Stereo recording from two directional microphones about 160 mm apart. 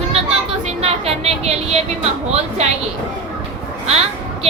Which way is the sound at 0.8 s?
40° right (ahead or behind).